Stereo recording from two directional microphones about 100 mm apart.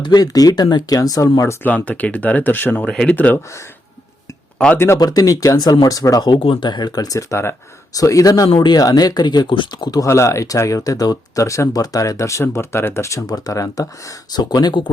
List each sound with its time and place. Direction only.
0.0 s speech: 40° left (ahead or behind)
1.6 s speech: 15° left (ahead or behind)
4.5 s speech: 10° left (ahead or behind)
4.9 s speech: 40° left (ahead or behind)
6.3 s speech: 60° left (ahead or behind)
6.7 s speech: 45° left (ahead or behind)
8.4 s speech: 65° left (ahead or behind)
8.7 s speech: 40° left (ahead or behind)
10.1 s speech: 30° left (ahead or behind); by 14.8 s 50° left (ahead or behind)